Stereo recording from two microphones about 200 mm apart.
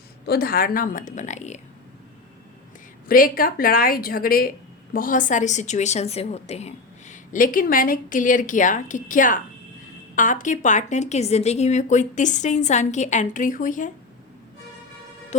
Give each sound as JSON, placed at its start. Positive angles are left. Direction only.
{"t": 0.3, "sound": "a woman's voice", "side_deg": 50}
{"t": 3.1, "sound": "a woman's voice", "side_deg": 45}